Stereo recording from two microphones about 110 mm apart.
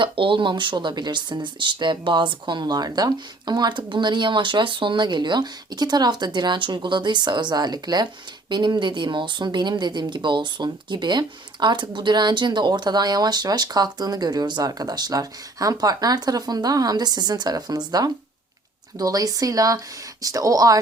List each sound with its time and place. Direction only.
0.0 s speech: 50° right (ahead or behind); by 20.8 s 35° right (ahead or behind)